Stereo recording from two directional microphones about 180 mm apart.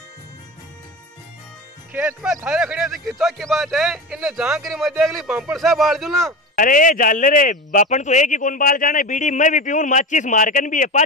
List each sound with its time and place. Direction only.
1.9 s speech: 10° right (ahead or behind)
6.5 s speech: 50° left (ahead or behind)